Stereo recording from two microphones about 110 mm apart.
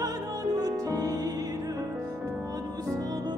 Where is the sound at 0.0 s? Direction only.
30° right (ahead or behind).